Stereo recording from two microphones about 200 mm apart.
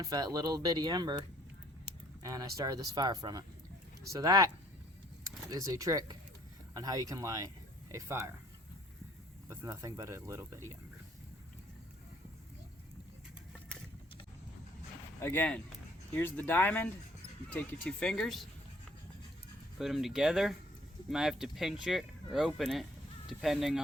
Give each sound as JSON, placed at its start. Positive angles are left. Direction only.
{"t": 0.0, "sound": "speech", "side_deg": -20}
{"t": 2.2, "sound": "speech", "side_deg": -15}
{"t": 9.5, "sound": "speech", "side_deg": -15}
{"t": 15.2, "sound": "speech", "side_deg": 10}
{"t": 19.8, "sound": "speech", "side_deg": 0}